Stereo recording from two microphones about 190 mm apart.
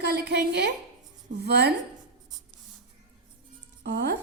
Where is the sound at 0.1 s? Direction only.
55° right (ahead or behind).